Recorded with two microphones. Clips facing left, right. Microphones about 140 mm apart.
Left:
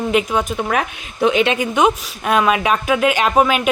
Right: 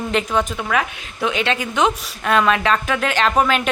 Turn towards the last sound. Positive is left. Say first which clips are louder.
# left 2 dB
turn(degrees=10)  # may be behind; listen again after turning